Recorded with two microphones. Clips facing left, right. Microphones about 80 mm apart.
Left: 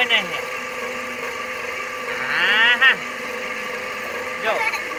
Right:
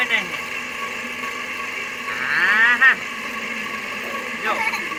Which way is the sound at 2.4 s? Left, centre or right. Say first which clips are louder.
Right 1 dB; right.